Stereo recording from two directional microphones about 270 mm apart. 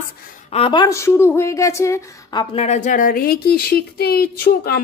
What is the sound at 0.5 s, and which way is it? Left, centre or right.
A woman's voice, centre.